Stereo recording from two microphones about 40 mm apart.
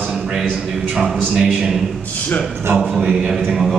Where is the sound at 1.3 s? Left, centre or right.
Right.